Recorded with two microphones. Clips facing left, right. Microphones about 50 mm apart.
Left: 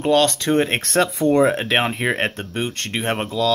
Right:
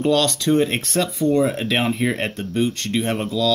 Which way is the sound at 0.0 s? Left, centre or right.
Left.